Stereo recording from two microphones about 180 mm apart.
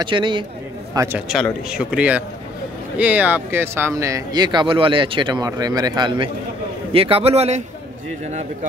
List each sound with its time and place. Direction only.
0.0 s speech: 25° right (ahead or behind)
0.9 s a man's voice: 10° right (ahead or behind); by 7.6 s 35° right (ahead or behind)